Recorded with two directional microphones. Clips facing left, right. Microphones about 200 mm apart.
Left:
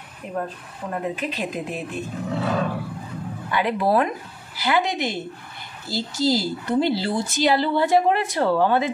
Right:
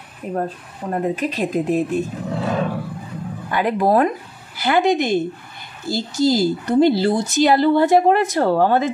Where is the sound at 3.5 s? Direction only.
45° right (ahead or behind).